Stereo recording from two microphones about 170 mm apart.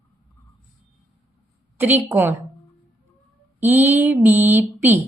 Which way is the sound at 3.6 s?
15° right (ahead or behind).